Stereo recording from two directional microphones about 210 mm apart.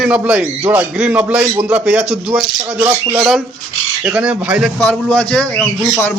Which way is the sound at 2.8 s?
10° right (ahead or behind).